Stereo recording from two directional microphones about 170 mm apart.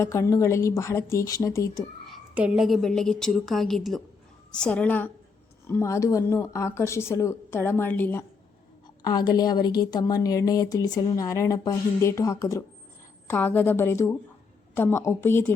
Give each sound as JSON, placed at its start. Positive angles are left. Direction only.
{"t": 0.0, "sound": "speech", "side_deg": 15}
{"t": 2.0, "sound": "a sound", "side_deg": -5}
{"t": 2.6, "sound": "a woman's voice", "side_deg": 0}
{"t": 9.0, "sound": "a woman's voice", "side_deg": 25}